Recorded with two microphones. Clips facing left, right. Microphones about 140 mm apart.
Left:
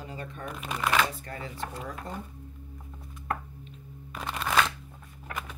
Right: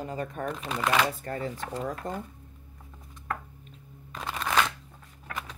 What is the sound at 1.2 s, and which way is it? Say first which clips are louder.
Speech: right 4 dB; 40° right (ahead or behind).